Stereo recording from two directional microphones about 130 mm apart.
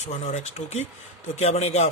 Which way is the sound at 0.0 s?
60° left (ahead or behind).